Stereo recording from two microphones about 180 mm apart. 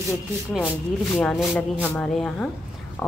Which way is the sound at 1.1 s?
5° left (ahead or behind).